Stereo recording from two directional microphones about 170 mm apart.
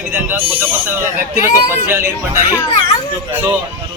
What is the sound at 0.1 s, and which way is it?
Speech, 10° right (ahead or behind).